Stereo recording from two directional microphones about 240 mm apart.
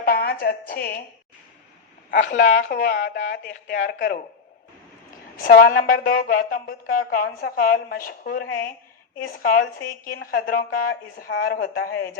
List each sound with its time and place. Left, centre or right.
0.0 s a woman's voice: left
2.0 s speech: left
5.4 s speech: left